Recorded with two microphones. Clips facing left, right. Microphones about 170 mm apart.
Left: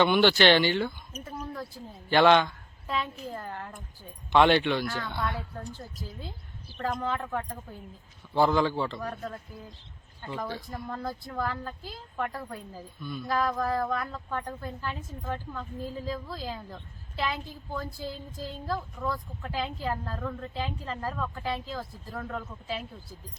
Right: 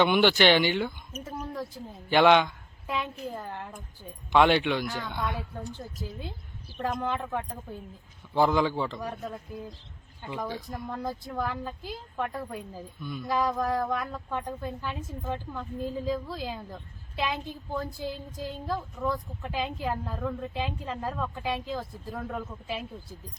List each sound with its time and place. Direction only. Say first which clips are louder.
0.0 s a woman's voice: even; 15° right (ahead or behind)
2.0 s a woman's voice: even; 15° right (ahead or behind)
6.7 s a woman's voice: right 1 dB; 10° right (ahead or behind)